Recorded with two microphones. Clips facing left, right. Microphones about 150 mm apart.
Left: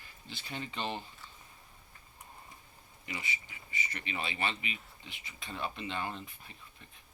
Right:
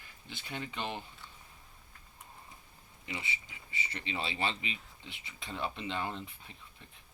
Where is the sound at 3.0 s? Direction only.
25° right (ahead or behind).